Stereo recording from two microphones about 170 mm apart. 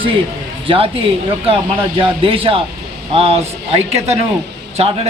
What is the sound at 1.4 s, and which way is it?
Speech, 30° right (ahead or behind).